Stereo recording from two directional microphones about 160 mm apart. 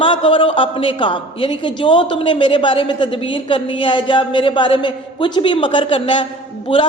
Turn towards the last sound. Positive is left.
turn(degrees=30)  # may be behind; listen again after turning